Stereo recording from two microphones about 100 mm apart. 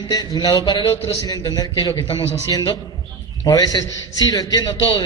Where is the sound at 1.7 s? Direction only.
55° left (ahead or behind).